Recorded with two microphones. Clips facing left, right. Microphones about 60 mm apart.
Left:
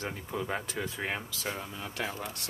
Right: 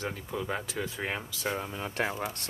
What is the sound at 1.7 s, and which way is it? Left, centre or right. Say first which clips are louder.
Speech: right 4 dB; right.